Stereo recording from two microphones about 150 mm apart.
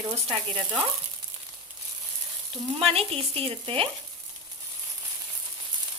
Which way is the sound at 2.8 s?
40° right (ahead or behind).